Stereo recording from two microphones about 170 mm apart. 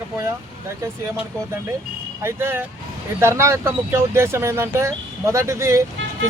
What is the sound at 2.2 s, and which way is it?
Speech, 15° right (ahead or behind).